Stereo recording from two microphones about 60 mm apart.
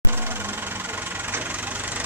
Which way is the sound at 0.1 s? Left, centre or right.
Right.